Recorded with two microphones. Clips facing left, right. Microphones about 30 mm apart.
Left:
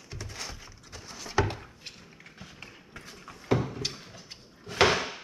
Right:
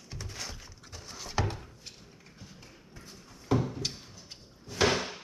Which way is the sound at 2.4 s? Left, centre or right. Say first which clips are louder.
Left 5 dB; left.